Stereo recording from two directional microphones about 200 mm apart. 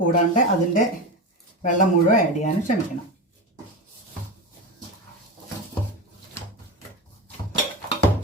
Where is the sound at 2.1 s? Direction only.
35° left (ahead or behind).